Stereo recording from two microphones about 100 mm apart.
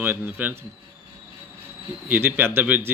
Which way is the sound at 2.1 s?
20° right (ahead or behind).